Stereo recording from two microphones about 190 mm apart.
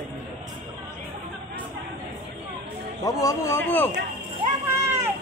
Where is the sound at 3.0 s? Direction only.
20° left (ahead or behind).